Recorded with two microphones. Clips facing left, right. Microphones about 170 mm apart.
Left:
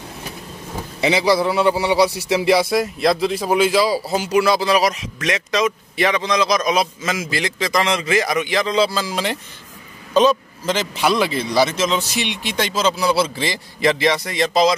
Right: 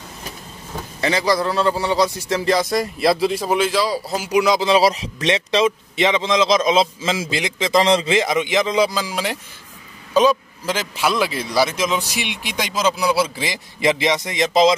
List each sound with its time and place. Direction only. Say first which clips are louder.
1.0 s a man's voice: left 2 dB; 10° left (ahead or behind)
4.3 s a man's voice: right 1 dB; 15° right (ahead or behind)